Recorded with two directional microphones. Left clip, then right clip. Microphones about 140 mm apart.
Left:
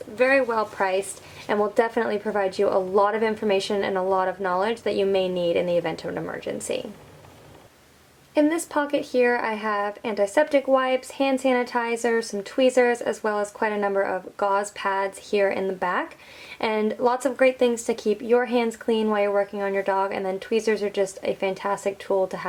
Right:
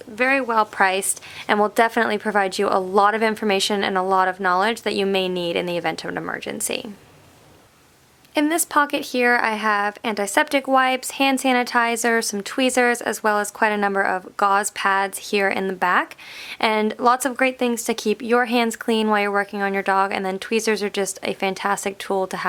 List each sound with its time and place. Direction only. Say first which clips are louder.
0.2 s a woman's voice: right 2 dB; 25° right (ahead or behind)
8.4 s speech: right 3 dB; 35° right (ahead or behind)